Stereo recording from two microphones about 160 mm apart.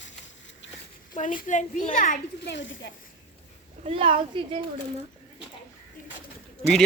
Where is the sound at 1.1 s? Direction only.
55° left (ahead or behind).